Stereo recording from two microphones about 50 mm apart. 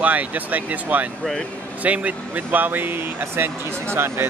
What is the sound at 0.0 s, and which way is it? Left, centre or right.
Speech, right.